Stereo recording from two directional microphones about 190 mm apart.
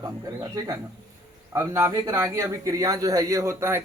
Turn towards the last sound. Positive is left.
turn(degrees=-15)  # may be behind; listen again after turning